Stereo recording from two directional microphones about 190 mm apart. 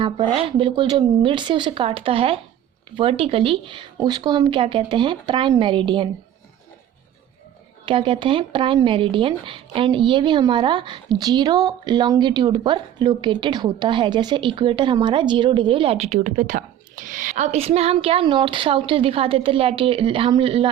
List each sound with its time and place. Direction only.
0.0 s speech: 25° right (ahead or behind)
7.9 s speech: 25° right (ahead or behind)